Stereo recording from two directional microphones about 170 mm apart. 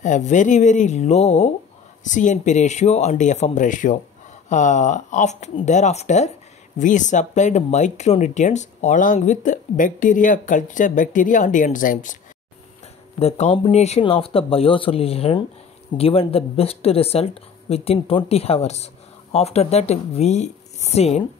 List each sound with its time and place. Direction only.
0.0 s speech: 45° left (ahead or behind)
13.2 s speech: 40° left (ahead or behind)